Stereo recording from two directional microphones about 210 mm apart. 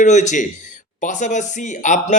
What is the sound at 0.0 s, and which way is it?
Speech, 35° left (ahead or behind).